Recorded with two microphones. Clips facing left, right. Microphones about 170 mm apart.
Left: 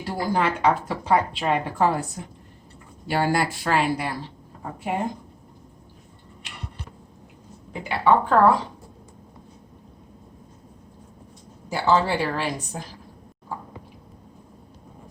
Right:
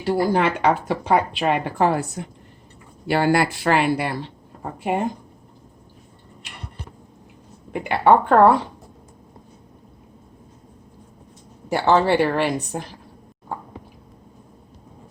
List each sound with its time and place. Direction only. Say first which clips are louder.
0.0 s speech: right 5 dB; 70° right (ahead or behind)
7.7 s a woman's voice: right 4 dB; 60° right (ahead or behind)
11.7 s a woman's voice: right 4 dB; 65° right (ahead or behind)